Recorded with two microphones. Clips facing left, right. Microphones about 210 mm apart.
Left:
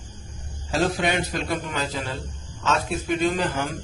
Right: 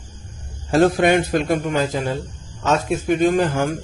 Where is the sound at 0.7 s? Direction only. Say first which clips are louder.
Right 8 dB; 55° right (ahead or behind).